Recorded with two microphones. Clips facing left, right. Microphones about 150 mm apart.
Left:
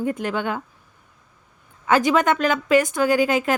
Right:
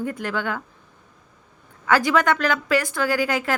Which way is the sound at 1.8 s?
20° left (ahead or behind).